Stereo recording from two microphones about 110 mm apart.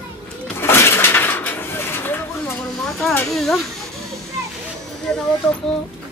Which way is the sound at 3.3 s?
5° left (ahead or behind).